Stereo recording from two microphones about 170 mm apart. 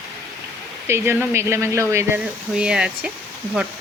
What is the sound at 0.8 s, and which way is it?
Speech, 15° right (ahead or behind).